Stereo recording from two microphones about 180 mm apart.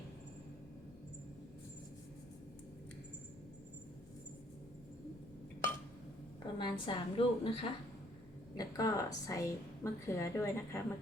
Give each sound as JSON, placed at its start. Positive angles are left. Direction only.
{"t": 6.6, "sound": "a woman's voice", "side_deg": 30}